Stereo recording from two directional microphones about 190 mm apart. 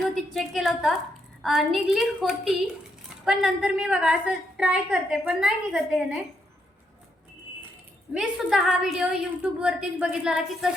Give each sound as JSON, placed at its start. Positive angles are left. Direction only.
{"t": 0.0, "sound": "a woman's voice", "side_deg": 0}
{"t": 8.1, "sound": "a woman's voice", "side_deg": -5}